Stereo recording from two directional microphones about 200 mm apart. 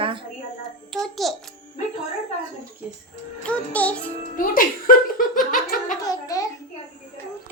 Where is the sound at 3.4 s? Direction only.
5° left (ahead or behind).